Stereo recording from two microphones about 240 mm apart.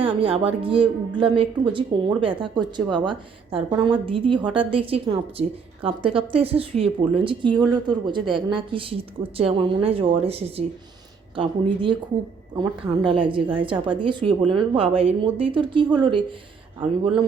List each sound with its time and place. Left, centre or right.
0.0 s a woman's voice: right